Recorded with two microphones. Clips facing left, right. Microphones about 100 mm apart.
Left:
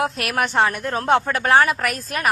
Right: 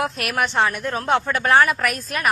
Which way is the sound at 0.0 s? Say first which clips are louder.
Left 1 dB; 35° left (ahead or behind).